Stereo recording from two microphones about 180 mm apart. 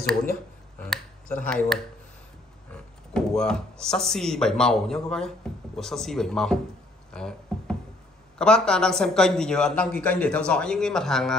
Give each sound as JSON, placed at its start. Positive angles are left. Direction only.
{"t": 1.4, "sound": "a man's voice", "side_deg": 5}
{"t": 3.1, "sound": "a man's voice", "side_deg": 5}
{"t": 7.2, "sound": "music", "side_deg": 5}
{"t": 8.4, "sound": "a man's voice", "side_deg": 5}